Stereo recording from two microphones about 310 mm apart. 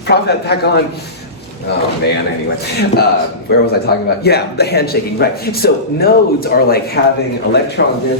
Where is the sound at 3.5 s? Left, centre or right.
Left.